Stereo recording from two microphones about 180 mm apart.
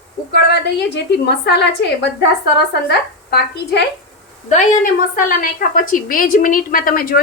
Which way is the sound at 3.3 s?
65° left (ahead or behind).